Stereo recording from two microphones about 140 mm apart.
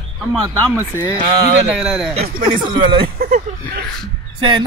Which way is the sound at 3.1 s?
75° right (ahead or behind).